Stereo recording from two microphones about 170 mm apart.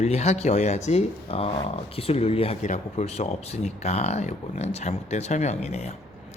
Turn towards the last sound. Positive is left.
turn(degrees=40)  # may be behind; listen again after turning